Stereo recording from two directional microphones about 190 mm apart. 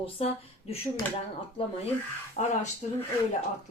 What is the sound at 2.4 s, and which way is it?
Speech, 40° left (ahead or behind).